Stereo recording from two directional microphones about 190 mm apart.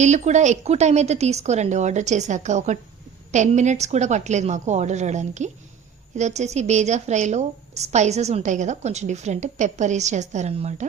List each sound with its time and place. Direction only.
0.0 s a woman's voice: 40° right (ahead or behind)